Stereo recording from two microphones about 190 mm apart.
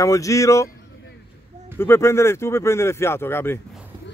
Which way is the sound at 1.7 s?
10° left (ahead or behind).